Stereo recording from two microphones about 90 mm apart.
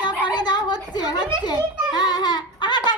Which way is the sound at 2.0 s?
50° left (ahead or behind).